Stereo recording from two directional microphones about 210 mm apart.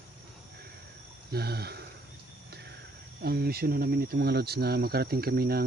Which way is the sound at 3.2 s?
50° right (ahead or behind).